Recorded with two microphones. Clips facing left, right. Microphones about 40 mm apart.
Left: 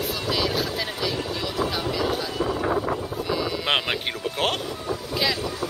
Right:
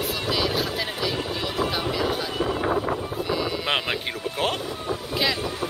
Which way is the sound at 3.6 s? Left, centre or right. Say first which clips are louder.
Left 1 dB; centre.